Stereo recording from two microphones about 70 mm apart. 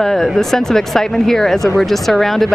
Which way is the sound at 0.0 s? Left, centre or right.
Centre.